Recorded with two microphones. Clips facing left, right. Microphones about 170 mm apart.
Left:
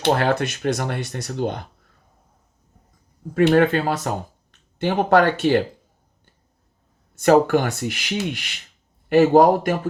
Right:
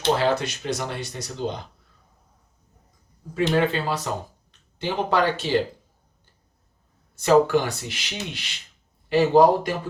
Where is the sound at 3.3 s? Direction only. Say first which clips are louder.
Left 6 dB; 55° left (ahead or behind).